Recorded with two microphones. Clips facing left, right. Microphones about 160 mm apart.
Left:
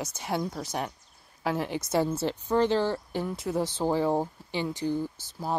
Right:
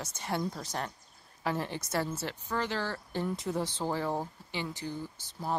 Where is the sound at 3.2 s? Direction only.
5° left (ahead or behind).